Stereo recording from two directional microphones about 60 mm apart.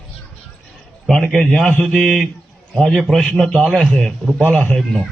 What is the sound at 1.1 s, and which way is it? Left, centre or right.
A man's voice, centre.